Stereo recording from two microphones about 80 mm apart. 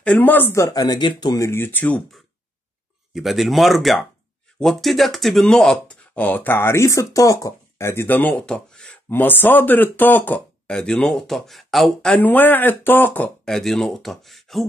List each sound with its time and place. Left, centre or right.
0.0 s speech: left
0.7 s speech: left
1.3 s speech: left
1.6 s speech: left
3.1 s speech: centre
6.1 s speech: centre
9.1 s speech: left
10.7 s speech: centre
12.2 s speech: left
13.5 s speech: centre